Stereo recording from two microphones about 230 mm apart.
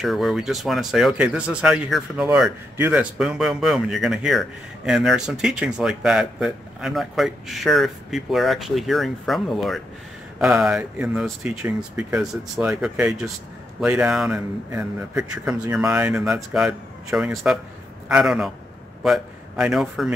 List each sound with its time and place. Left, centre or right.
0.0 s a man's voice: centre